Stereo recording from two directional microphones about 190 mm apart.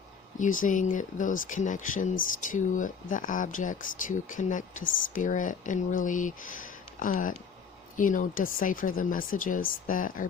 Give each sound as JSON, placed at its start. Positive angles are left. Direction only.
{"t": 0.3, "sound": "speech", "side_deg": 45}